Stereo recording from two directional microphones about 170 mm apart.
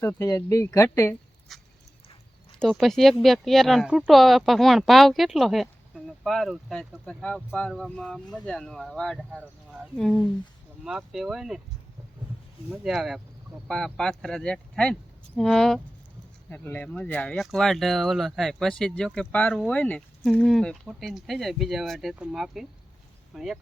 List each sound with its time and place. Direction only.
0.0 s speech: 15° left (ahead or behind)
1.5 s a sound: centre (ahead or behind)
2.6 s speech: centre (ahead or behind)
12.7 s speech: centre (ahead or behind)